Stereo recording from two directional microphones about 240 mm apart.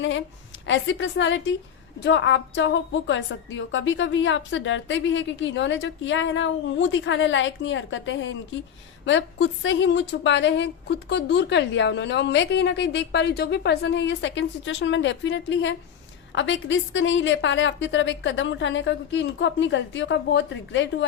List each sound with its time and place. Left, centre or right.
0.7 s a woman's voice: left